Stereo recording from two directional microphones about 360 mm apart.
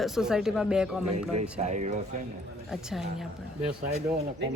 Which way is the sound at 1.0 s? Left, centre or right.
Right.